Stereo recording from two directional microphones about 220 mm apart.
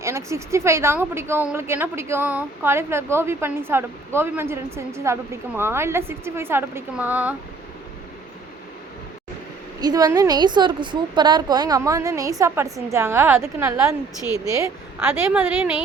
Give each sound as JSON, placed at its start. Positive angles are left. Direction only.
{"t": 0.0, "sound": "a woman's voice", "side_deg": -15}
{"t": 9.8, "sound": "a woman's voice", "side_deg": -15}
{"t": 14.9, "sound": "a woman's voice", "side_deg": -10}